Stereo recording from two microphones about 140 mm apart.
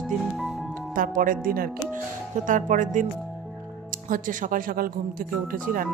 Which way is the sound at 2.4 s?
70° right (ahead or behind).